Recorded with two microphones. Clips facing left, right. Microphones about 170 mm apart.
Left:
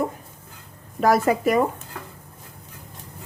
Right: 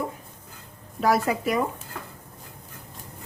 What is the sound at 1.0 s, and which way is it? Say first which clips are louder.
Speech: left 4 dB; 50° left (ahead or behind).